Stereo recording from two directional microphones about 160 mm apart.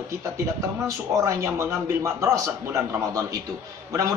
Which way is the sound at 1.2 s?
20° right (ahead or behind).